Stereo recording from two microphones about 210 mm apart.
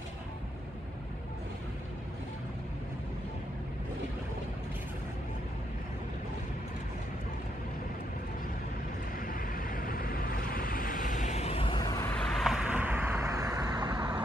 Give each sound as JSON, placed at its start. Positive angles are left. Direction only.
{"t": 9.3, "sound": "vehicle", "side_deg": 40}